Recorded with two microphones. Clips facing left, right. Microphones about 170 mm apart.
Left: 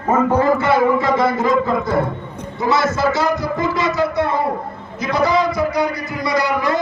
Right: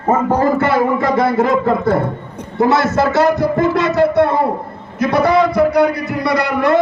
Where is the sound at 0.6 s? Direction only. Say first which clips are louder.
Right 1 dB; 55° right (ahead or behind).